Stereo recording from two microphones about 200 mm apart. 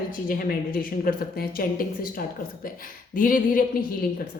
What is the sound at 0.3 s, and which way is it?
A woman's voice, 45° left (ahead or behind).